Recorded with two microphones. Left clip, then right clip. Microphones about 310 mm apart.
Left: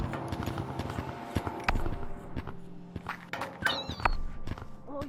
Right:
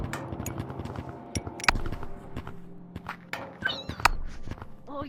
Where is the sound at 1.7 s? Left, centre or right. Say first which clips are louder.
Right 8 dB; right.